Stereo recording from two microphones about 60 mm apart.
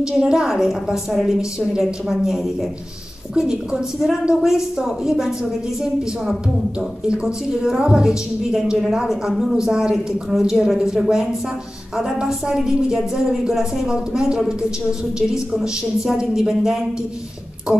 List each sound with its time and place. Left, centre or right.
0.0 s a woman's voice: centre
7.1 s a woman's voice: centre